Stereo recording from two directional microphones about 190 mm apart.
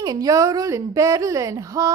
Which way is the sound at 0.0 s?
20° right (ahead or behind).